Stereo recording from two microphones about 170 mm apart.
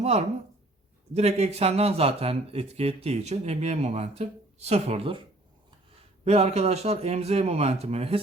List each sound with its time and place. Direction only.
0.0 s speech: 40° right (ahead or behind)
6.2 s speech: 40° right (ahead or behind)